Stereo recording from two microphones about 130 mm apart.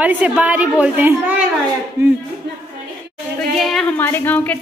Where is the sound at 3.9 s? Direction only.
15° left (ahead or behind).